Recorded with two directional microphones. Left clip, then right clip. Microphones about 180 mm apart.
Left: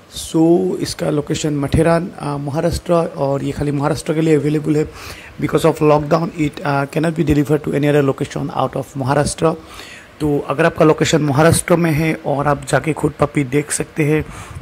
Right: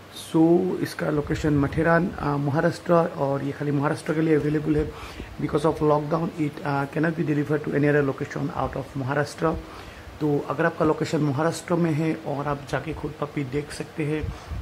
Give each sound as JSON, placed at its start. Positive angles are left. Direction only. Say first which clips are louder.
{"t": 0.3, "sound": "speech", "louder": "left 6 dB", "side_deg": 20}
{"t": 3.5, "sound": "a man's voice", "louder": "left 7 dB", "side_deg": 30}